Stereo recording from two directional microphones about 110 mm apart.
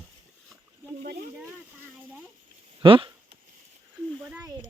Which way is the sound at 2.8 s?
55° right (ahead or behind).